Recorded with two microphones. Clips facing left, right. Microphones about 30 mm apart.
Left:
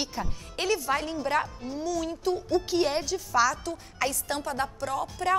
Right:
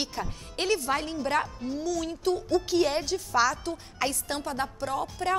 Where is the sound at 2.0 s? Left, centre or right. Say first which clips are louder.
Even; right.